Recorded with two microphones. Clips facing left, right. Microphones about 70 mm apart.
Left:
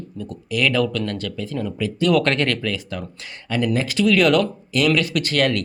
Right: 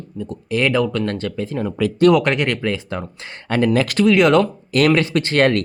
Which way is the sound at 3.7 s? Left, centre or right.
Right.